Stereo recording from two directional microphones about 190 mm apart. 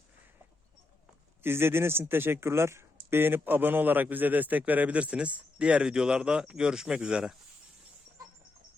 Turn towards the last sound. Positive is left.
turn(degrees=-5)  # may be behind; listen again after turning